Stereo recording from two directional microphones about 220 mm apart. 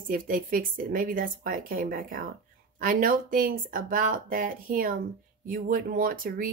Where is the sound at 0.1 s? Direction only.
40° right (ahead or behind).